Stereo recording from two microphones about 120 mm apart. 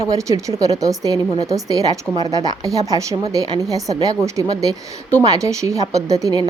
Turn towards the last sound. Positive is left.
turn(degrees=-30)  # may be behind; listen again after turning